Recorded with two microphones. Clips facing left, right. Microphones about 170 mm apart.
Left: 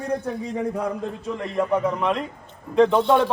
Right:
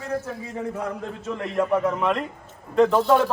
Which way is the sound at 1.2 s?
Centre (ahead or behind).